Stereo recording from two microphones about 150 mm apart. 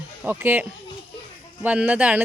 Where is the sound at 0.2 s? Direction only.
10° right (ahead or behind).